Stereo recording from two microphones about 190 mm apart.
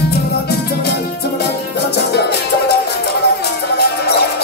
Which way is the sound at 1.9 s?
60° left (ahead or behind).